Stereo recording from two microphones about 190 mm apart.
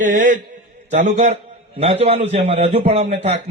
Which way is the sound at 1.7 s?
30° right (ahead or behind).